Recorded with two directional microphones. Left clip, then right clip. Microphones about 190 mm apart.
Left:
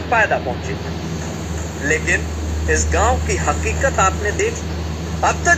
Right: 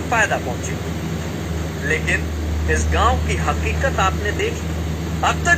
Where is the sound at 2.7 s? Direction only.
45° left (ahead or behind).